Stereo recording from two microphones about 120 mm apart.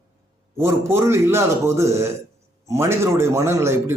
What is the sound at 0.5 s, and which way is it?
A man's voice, 20° right (ahead or behind).